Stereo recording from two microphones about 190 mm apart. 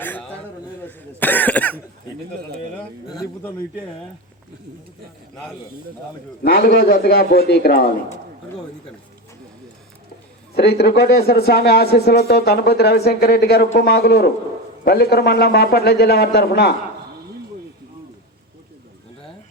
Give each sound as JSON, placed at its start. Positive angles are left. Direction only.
{"t": 0.0, "sound": "a sound", "side_deg": 10}
{"t": 0.9, "sound": "throat clearing", "side_deg": 10}
{"t": 2.7, "sound": "a man's voice", "side_deg": 5}
{"t": 6.4, "sound": "a man's voice", "side_deg": 50}
{"t": 10.5, "sound": "speech", "side_deg": 60}